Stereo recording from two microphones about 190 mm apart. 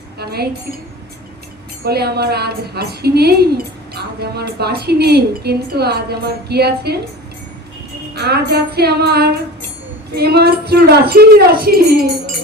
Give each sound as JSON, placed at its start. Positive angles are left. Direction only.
{"t": 0.2, "sound": "a woman's voice", "side_deg": -55}
{"t": 1.8, "sound": "a woman's voice", "side_deg": -55}
{"t": 8.1, "sound": "a woman's voice", "side_deg": -55}